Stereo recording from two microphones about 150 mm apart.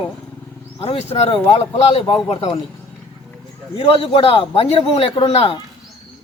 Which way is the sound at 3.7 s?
40° left (ahead or behind).